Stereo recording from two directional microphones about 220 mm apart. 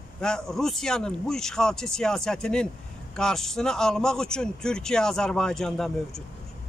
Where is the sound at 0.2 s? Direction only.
5° left (ahead or behind).